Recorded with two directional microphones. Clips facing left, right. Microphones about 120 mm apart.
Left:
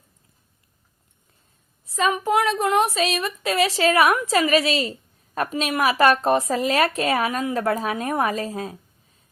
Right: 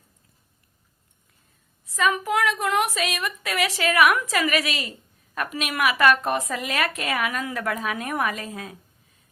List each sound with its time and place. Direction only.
1.8 s a woman's voice: 30° left (ahead or behind)